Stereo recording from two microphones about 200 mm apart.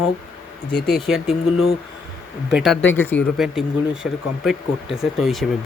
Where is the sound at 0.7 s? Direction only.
55° left (ahead or behind).